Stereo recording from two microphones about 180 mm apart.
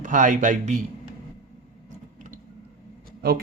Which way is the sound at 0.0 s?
45° right (ahead or behind).